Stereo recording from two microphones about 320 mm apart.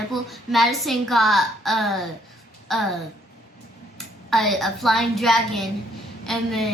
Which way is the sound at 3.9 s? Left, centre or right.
Centre.